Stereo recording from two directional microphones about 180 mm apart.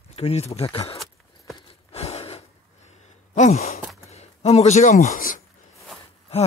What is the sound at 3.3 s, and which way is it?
Speech, 40° left (ahead or behind).